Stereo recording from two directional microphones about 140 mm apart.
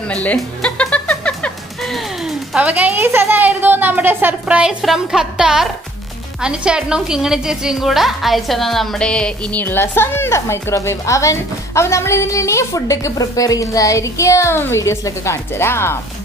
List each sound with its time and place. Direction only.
0.1 s a woman's voice: 10° left (ahead or behind)